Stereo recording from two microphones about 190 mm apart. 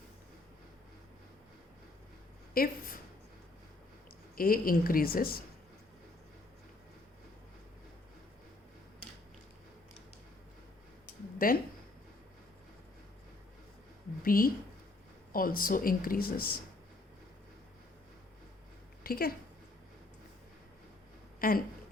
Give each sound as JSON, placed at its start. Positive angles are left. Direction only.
{"t": 2.5, "sound": "speech", "side_deg": 50}
{"t": 4.4, "sound": "speech", "side_deg": 50}
{"t": 11.4, "sound": "speech", "side_deg": 50}
{"t": 14.2, "sound": "a woman's voice", "side_deg": 50}
{"t": 19.0, "sound": "speech", "side_deg": 50}
{"t": 21.4, "sound": "a sound", "side_deg": 50}